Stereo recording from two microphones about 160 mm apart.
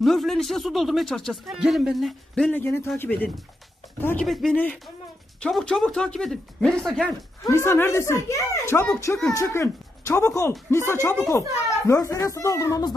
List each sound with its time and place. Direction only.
0.0 s a child's voice: centre (ahead or behind)
4.3 s speech: centre (ahead or behind)
7.5 s a child's voice: 15° left (ahead or behind)